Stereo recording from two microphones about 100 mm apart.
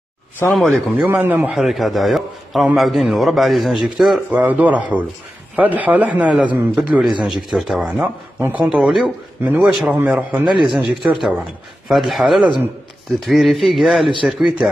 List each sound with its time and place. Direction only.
0.5 s a man's voice: centre (ahead or behind)
0.9 s a man's voice: 15° right (ahead or behind)
1.5 s a man's voice: 5° right (ahead or behind)
4.3 s a man's voice: 15° right (ahead or behind)
8.4 s a man's voice: 15° right (ahead or behind)
8.6 s a man's voice: 5° right (ahead or behind)
9.7 s a man's voice: 5° right (ahead or behind)
9.9 s a man's voice: 15° right (ahead or behind)
11.1 s a man's voice: 5° right (ahead or behind)